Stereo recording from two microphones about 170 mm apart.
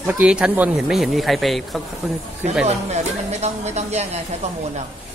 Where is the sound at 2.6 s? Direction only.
40° right (ahead or behind).